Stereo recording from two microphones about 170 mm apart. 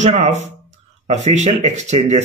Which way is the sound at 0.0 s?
45° right (ahead or behind).